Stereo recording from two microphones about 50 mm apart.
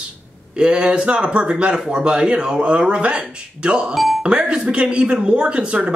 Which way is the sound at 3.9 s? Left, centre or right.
Centre.